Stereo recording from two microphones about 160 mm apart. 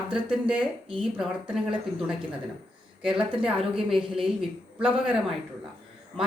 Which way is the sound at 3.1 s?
35° right (ahead or behind).